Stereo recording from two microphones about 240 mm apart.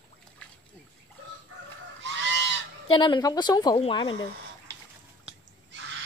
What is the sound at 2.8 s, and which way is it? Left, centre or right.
Speech, centre.